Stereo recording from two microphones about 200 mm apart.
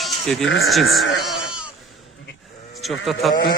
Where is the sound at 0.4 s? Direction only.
70° left (ahead or behind).